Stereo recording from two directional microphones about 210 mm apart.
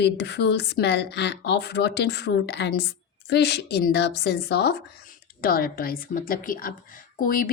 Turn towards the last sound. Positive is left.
turn(degrees=40)  # may be behind; listen again after turning